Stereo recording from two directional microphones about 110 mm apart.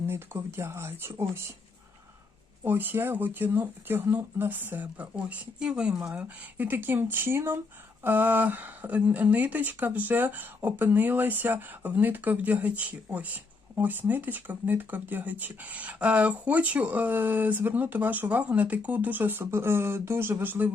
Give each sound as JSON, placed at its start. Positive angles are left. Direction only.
{"t": 0.0, "sound": "speech", "side_deg": -20}
{"t": 2.6, "sound": "a woman's voice", "side_deg": -20}